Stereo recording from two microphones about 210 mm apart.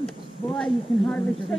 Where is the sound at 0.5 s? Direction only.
Centre (ahead or behind).